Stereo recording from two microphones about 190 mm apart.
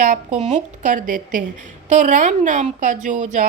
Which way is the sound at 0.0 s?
40° right (ahead or behind).